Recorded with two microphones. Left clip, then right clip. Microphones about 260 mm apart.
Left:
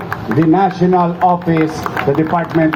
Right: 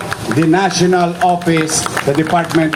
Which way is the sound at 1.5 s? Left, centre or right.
Right.